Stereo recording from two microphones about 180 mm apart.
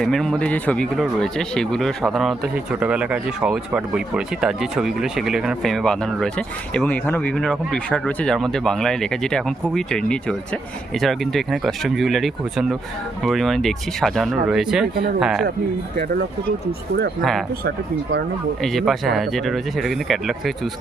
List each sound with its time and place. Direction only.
0.0 s speech: 5° left (ahead or behind)
17.7 s speech: 65° right (ahead or behind)
18.6 s speech: centre (ahead or behind)